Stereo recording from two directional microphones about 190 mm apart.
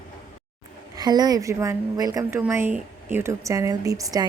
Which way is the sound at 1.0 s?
20° right (ahead or behind).